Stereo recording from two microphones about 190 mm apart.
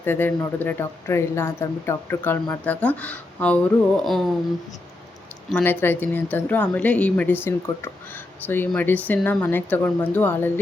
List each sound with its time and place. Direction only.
0.0 s speech: 10° left (ahead or behind)
4.0 s a sound: centre (ahead or behind)
5.5 s speech: 10° left (ahead or behind)